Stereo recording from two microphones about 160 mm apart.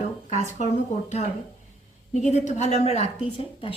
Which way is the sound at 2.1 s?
50° left (ahead or behind).